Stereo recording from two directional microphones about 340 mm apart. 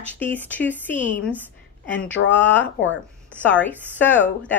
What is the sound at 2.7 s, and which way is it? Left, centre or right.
Speech, left.